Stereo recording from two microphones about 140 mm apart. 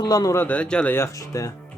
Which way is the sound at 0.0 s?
25° left (ahead or behind).